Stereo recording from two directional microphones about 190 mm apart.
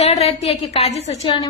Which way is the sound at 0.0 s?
35° left (ahead or behind).